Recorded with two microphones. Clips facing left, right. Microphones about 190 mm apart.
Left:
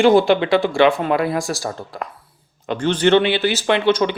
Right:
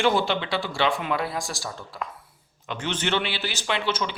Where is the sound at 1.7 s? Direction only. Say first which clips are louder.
Left 5 dB; 45° left (ahead or behind).